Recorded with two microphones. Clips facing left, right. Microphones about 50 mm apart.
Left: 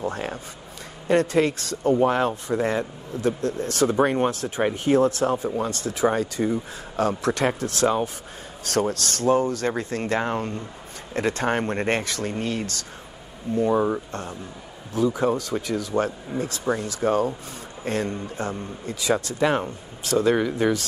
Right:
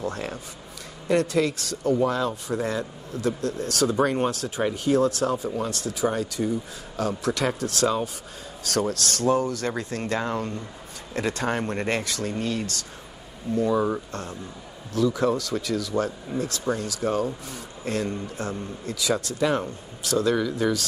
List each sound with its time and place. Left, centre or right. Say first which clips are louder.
1.0 s speech: left 2 dB; left
15.0 s speech: left 1 dB; left